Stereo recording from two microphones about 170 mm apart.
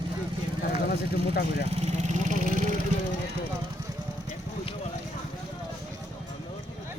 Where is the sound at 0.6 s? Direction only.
60° left (ahead or behind).